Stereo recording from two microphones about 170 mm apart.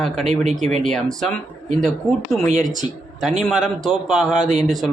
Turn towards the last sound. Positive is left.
turn(degrees=0)  # may be behind; listen again after turning